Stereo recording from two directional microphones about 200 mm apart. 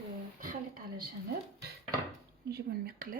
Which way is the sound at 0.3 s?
45° right (ahead or behind).